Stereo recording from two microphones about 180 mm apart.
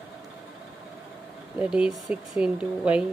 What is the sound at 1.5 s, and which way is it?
Speech, 5° right (ahead or behind).